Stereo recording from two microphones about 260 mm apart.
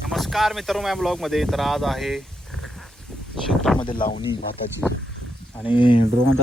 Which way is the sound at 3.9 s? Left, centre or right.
Left.